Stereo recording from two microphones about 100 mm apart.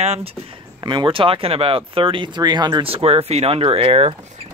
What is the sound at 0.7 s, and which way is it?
Speech, 50° right (ahead or behind).